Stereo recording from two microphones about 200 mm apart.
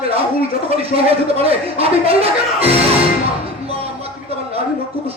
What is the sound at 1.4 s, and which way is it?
Speech, 30° right (ahead or behind).